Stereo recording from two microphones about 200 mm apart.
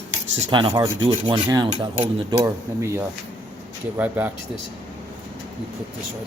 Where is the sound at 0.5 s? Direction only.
20° right (ahead or behind).